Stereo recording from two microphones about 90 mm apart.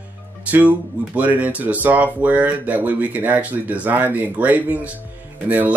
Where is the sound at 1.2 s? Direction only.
15° right (ahead or behind).